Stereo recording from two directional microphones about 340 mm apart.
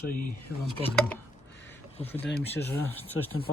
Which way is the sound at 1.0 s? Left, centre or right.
Centre.